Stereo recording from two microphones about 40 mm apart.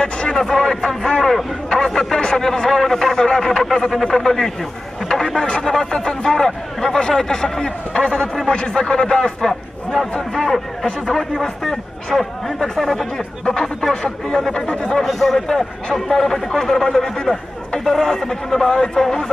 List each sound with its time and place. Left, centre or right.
0.3 s a man's voice: centre
3.6 s a man's voice: centre
5.0 s a sound: centre
8.5 s a man's voice: left
15.0 s a man's voice: centre